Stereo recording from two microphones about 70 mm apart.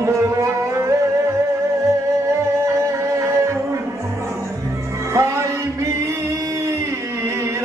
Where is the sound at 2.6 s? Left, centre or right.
Right.